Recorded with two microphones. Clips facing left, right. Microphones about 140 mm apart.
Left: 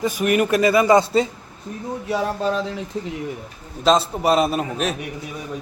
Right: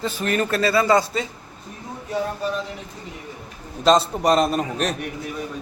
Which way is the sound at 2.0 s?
90° left.